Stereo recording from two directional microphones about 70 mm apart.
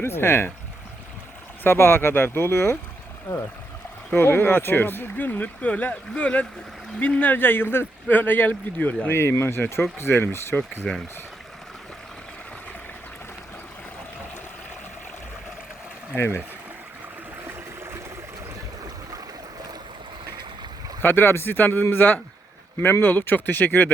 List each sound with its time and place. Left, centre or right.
0.0 s speech: left
1.6 s speech: left
4.1 s speech: left
9.0 s speech: left
10.5 s speech: centre
16.1 s speech: left
21.0 s speech: left